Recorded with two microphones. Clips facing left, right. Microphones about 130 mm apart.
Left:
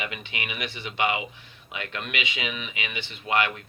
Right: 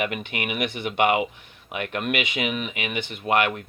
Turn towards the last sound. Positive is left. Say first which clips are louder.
# right 4 dB
turn(degrees=-55)  # may be behind; listen again after turning